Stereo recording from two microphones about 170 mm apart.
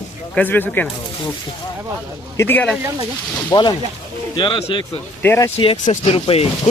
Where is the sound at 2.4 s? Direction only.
10° left (ahead or behind).